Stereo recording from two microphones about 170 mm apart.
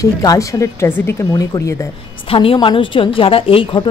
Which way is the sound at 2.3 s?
30° left (ahead or behind).